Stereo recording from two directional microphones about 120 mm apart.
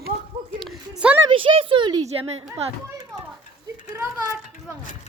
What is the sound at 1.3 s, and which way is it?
Speech, 50° right (ahead or behind).